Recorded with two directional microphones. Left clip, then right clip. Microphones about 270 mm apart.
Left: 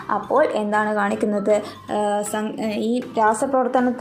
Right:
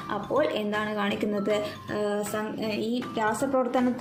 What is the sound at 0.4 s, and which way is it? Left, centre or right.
Speech, left.